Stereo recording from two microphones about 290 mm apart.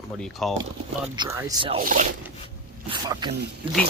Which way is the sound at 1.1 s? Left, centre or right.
Centre.